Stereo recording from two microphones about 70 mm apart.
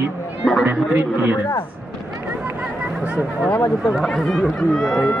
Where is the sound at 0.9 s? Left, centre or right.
Right.